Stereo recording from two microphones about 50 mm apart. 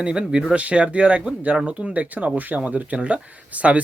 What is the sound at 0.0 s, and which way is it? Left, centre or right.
Speech, right.